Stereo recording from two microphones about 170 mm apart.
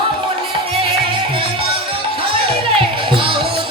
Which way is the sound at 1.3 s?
30° right (ahead or behind).